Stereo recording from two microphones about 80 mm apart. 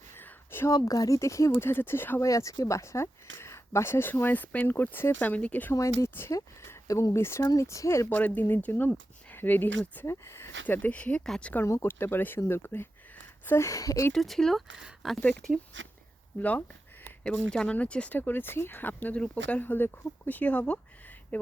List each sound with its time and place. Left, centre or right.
0.2 s a sound: left
0.7 s speech: left
2.2 s speech: left; by 5.7 s centre
5.7 s speech: left
8.1 s speech: left
10.1 s speech: left; by 11.6 s centre
11.6 s speech: left
12.4 s a sound: left
13.7 s speech: left
14.1 s speech: centre
15.2 s speech: centre
16.4 s a sound: left
17.2 s speech: centre